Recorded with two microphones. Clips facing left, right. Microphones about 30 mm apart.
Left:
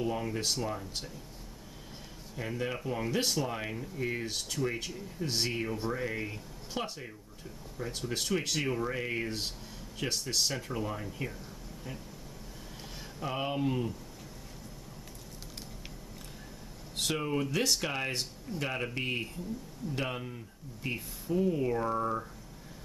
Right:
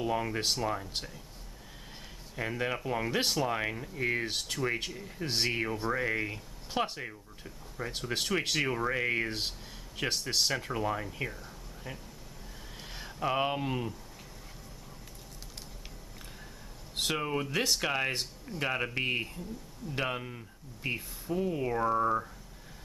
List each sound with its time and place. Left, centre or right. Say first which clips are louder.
0.0 s speech: right 2 dB; right
2.3 s speech: right 2 dB; right
13.0 s speech: right 5 dB; centre
16.9 s speech: right 1 dB; centre